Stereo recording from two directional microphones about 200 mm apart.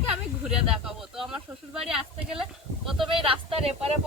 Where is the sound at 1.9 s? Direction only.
5° right (ahead or behind).